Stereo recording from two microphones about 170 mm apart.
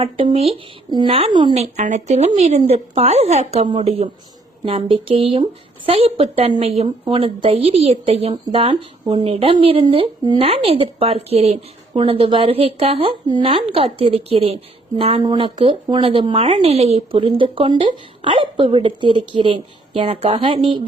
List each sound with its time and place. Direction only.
0.3 s a woman's voice: 35° right (ahead or behind)
1.7 s a woman's voice: 45° right (ahead or behind)